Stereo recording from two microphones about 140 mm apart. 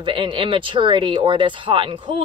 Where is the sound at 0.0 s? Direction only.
35° right (ahead or behind).